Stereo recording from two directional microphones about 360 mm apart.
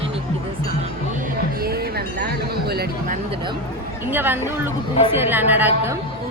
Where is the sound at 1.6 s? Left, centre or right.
Right.